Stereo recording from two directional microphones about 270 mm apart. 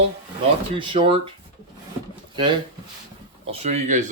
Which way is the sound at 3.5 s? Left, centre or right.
Right.